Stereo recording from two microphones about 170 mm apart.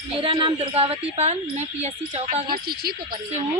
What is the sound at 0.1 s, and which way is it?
Speech, 35° right (ahead or behind).